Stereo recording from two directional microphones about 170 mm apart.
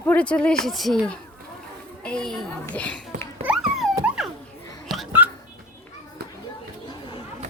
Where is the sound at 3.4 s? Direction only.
5° right (ahead or behind).